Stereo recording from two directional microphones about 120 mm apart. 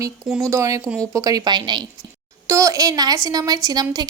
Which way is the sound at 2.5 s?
25° right (ahead or behind).